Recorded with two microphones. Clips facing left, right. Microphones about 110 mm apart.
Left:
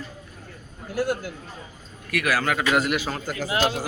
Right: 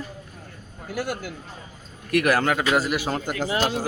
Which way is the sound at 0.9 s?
75° right (ahead or behind).